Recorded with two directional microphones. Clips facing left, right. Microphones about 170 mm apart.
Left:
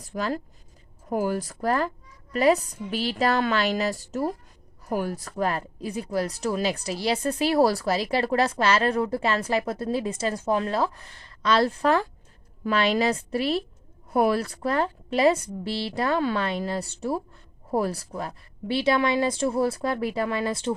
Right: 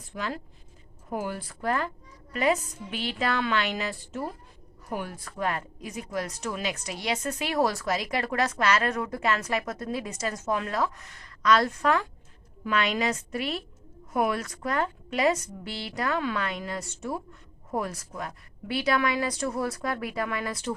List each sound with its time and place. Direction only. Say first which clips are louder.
0.0 s a woman's voice: left 5 dB; 40° left (ahead or behind)